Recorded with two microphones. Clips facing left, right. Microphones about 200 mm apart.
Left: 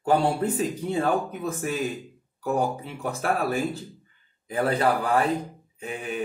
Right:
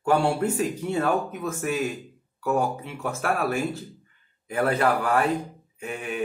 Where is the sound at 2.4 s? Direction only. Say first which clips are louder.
Right 1 dB; 35° left (ahead or behind).